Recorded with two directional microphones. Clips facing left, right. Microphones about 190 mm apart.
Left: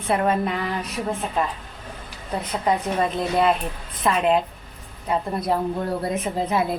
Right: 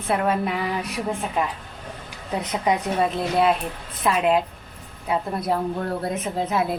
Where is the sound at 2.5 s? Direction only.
15° right (ahead or behind).